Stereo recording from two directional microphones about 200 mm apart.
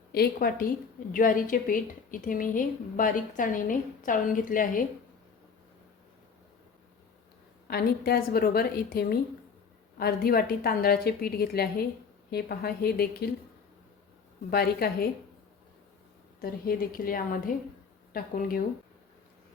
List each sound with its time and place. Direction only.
0.1 s a woman's voice: 50° left (ahead or behind)
7.7 s a woman's voice: 50° left (ahead or behind)
14.5 s a woman's voice: 50° left (ahead or behind)
16.4 s a woman's voice: 50° left (ahead or behind)